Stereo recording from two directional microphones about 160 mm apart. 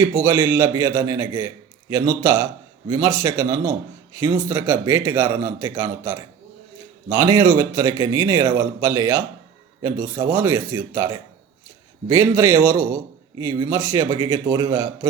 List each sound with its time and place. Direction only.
0.0 s a man's voice: 15° right (ahead or behind)
10.1 s a man's voice: 15° right (ahead or behind)